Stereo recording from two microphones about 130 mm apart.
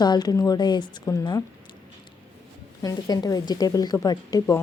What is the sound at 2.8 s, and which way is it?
Speech, 30° left (ahead or behind).